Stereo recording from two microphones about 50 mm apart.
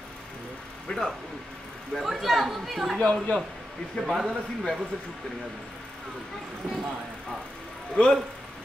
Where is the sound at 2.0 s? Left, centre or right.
Centre.